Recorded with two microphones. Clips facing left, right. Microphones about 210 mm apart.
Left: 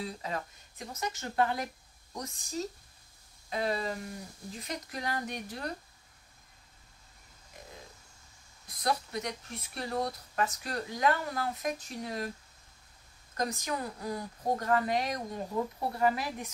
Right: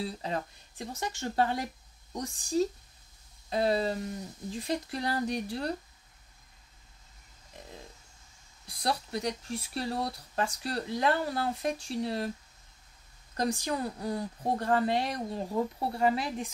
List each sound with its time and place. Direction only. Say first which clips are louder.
0.0 s speech: right 3 dB; 30° right (ahead or behind)
8.6 s speech: even; 30° right (ahead or behind)
13.4 s a woman's voice: right 3 dB; 30° right (ahead or behind)